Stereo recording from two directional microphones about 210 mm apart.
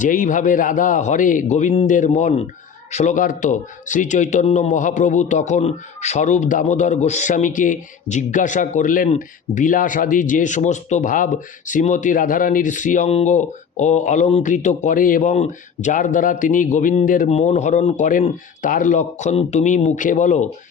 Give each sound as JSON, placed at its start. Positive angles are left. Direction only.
{"t": 0.0, "sound": "a man's voice", "side_deg": 40}